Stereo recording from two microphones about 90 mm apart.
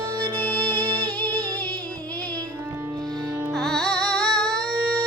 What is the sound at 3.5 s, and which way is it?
Music, 5° left (ahead or behind).